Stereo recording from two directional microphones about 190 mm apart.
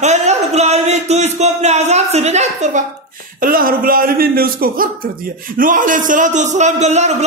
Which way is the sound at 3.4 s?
50° right (ahead or behind).